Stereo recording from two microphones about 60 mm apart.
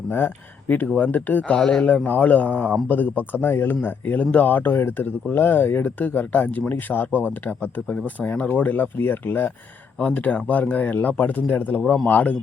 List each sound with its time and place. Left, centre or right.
0.1 s speech: left
1.5 s speech: centre
2.0 s speech: left
10.0 s speech: left